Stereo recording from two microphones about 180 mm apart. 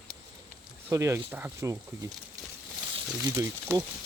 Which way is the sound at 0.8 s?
15° right (ahead or behind).